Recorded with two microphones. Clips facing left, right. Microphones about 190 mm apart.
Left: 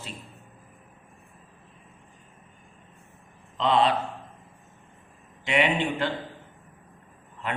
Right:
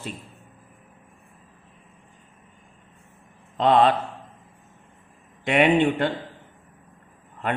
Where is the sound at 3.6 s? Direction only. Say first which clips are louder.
Right 5 dB; 55° right (ahead or behind).